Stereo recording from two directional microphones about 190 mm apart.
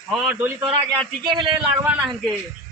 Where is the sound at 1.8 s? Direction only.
5° right (ahead or behind).